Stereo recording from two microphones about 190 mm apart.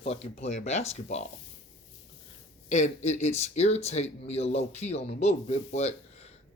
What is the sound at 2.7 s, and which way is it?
Speech, 40° left (ahead or behind).